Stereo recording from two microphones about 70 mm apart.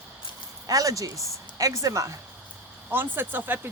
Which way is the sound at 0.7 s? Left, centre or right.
Right.